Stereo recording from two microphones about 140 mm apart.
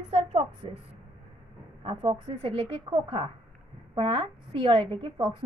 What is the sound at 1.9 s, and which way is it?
Speech, 50° right (ahead or behind).